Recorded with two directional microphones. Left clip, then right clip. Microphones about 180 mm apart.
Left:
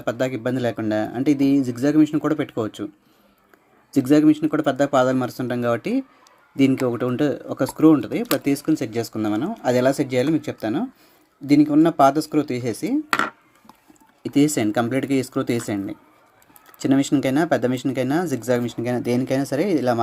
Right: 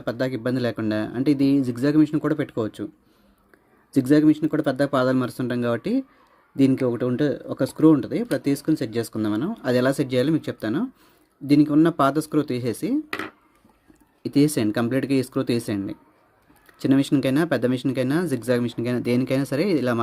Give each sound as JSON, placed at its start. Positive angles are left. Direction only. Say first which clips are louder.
{"t": 0.0, "sound": "speech", "louder": "left 2 dB", "side_deg": -25}
{"t": 3.9, "sound": "speech", "louder": "left 2 dB", "side_deg": -25}
{"t": 13.1, "sound": "a sound", "louder": "left 10 dB", "side_deg": 40}
{"t": 14.2, "sound": "speech", "louder": "left 1 dB", "side_deg": -30}